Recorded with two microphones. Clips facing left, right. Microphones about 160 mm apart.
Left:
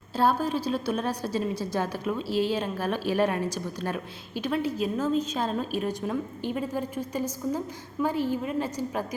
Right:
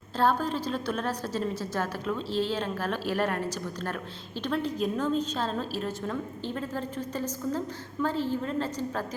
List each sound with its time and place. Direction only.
0.2 s a woman's voice: 10° left (ahead or behind)